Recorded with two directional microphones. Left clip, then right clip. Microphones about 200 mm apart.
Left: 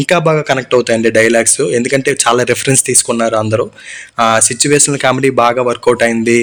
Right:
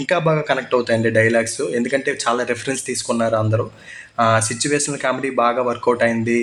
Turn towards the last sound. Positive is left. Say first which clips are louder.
# left 7 dB
turn(degrees=45)  # may be behind; listen again after turning